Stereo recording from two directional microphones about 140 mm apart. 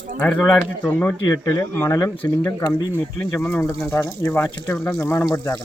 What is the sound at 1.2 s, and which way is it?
Speech, 25° left (ahead or behind).